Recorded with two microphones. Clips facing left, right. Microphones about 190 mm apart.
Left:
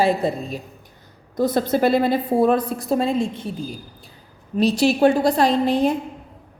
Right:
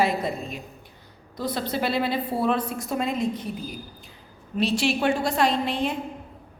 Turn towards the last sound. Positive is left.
turn(degrees=40)  # may be behind; listen again after turning